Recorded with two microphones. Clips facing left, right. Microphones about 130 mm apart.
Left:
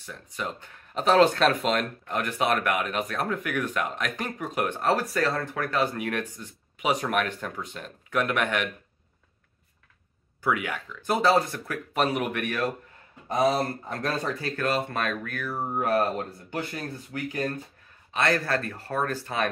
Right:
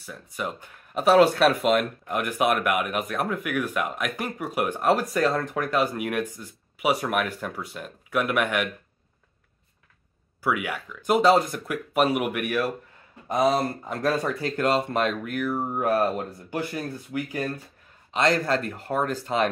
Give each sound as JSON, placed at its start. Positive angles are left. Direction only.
{"t": 0.0, "sound": "speech", "side_deg": -10}
{"t": 10.4, "sound": "speech", "side_deg": -10}